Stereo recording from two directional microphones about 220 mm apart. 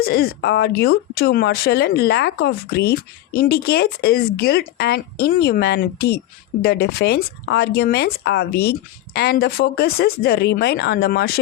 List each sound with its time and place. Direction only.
0.0 s speech: 45° left (ahead or behind)